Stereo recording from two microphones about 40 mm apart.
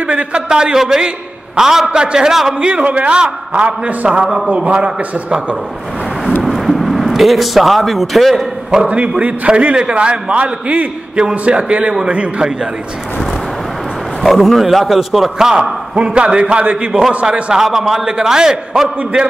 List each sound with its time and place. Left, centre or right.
0.5 s a man's voice: centre
2.6 s a man's voice: right
6.4 s a sound: centre
8.8 s a man's voice: right
14.2 s a man's voice: centre; by 17.6 s right
17.6 s a man's voice: centre